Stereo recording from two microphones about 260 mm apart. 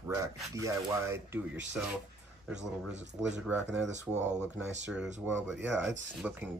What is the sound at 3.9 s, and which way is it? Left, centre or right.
Speech, right.